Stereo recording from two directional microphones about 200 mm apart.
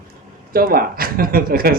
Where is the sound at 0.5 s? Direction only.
50° right (ahead or behind).